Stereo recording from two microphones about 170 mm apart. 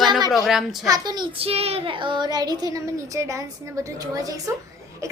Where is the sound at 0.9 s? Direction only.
25° right (ahead or behind).